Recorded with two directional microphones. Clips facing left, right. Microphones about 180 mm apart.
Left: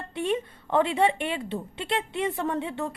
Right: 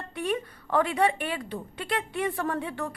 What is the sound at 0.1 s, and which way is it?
A woman's voice, 25° left (ahead or behind).